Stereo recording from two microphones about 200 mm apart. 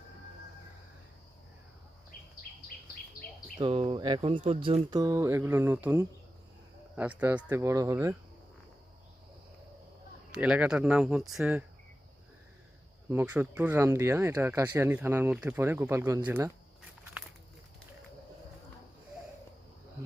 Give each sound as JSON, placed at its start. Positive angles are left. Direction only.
{"t": 2.5, "sound": "insect", "side_deg": 45}
{"t": 3.6, "sound": "speech", "side_deg": -30}
{"t": 4.9, "sound": "speech", "side_deg": -15}
{"t": 10.3, "sound": "speech", "side_deg": -5}
{"t": 13.1, "sound": "speech", "side_deg": -10}